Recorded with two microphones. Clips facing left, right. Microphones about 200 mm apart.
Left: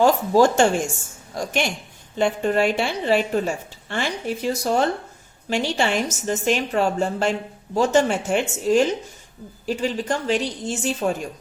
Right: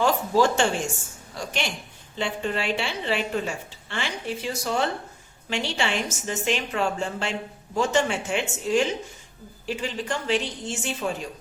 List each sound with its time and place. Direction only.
0.0 s a woman's voice: 45° left (ahead or behind)